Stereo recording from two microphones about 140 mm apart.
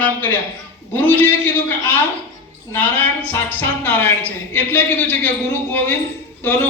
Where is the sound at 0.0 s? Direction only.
15° left (ahead or behind).